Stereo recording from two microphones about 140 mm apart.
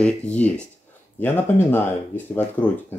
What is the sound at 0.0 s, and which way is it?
Speech, 10° left (ahead or behind).